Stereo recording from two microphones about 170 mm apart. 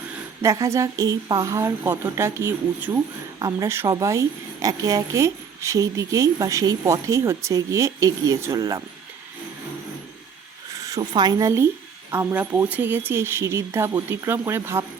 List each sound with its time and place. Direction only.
0.4 s speech: 20° right (ahead or behind)
10.8 s speech: 20° right (ahead or behind)